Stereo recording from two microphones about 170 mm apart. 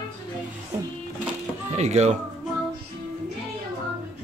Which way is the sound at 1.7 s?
40° right (ahead or behind).